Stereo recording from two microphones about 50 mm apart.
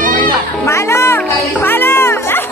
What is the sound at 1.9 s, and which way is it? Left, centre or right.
Music, left.